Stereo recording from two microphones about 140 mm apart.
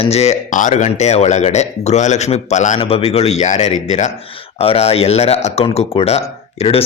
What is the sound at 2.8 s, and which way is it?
Speech, 45° left (ahead or behind).